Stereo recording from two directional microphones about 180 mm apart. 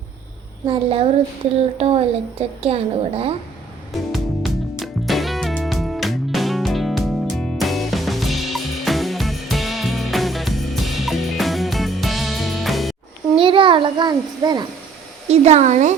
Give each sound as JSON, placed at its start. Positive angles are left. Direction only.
{"t": 0.7, "sound": "a woman's voice", "side_deg": -30}
{"t": 4.1, "sound": "music", "side_deg": 0}
{"t": 13.3, "sound": "a child's voice", "side_deg": -30}
{"t": 15.3, "sound": "a woman's voice", "side_deg": -40}